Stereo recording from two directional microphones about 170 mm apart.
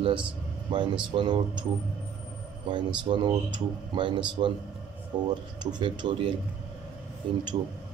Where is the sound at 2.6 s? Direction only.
25° right (ahead or behind).